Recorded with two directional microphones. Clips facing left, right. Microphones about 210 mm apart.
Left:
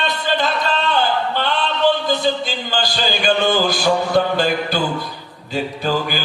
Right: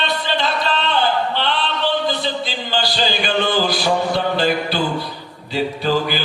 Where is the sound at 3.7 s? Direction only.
45° left (ahead or behind).